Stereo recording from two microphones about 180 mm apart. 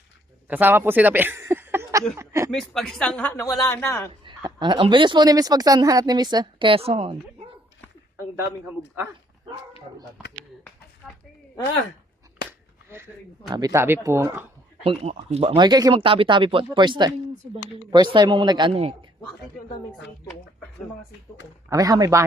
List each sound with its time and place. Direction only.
0.4 s a man's voice: 10° right (ahead or behind)
2.1 s a sound: 15° right (ahead or behind)
2.5 s speech: centre (ahead or behind)
3.4 s speech: 20° left (ahead or behind)
4.2 s a woman's voice: 25° right (ahead or behind)
8.4 s speech: 10° right (ahead or behind)
12.5 s a sound: 10° right (ahead or behind)
13.5 s speech: 20° right (ahead or behind)
14.8 s a woman's voice: 35° right (ahead or behind)
21.7 s a woman's voice: 20° right (ahead or behind)